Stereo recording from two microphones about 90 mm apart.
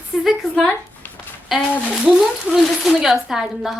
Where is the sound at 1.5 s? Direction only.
Centre (ahead or behind).